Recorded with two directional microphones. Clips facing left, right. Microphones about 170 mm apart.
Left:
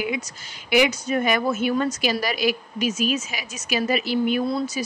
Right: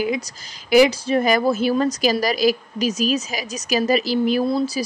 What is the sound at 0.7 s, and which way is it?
A woman's voice, 35° right (ahead or behind).